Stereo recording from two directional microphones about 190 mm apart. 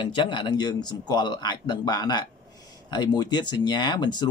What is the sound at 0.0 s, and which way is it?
Speech, 25° left (ahead or behind).